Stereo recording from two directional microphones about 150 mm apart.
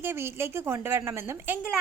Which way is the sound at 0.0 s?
15° right (ahead or behind).